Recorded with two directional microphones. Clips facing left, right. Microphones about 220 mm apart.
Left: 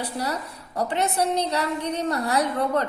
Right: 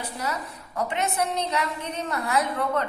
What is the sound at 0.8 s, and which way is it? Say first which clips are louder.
A woman's voice: left 3 dB; 35° left (ahead or behind).